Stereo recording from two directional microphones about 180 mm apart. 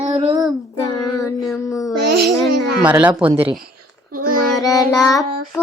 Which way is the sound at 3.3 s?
30° right (ahead or behind).